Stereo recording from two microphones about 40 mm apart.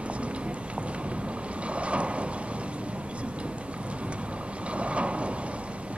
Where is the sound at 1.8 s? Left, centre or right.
Right.